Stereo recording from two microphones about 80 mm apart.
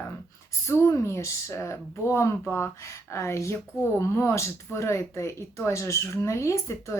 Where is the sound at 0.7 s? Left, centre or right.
Left.